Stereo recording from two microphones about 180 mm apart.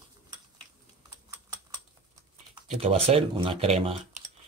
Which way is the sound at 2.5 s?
35° right (ahead or behind).